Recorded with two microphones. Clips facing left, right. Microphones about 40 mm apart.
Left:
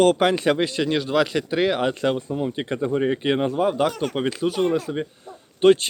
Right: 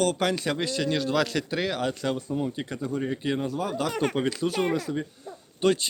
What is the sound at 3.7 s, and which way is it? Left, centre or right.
Speech, left.